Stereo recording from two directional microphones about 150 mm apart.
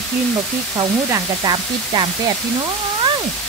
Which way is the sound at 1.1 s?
30° right (ahead or behind).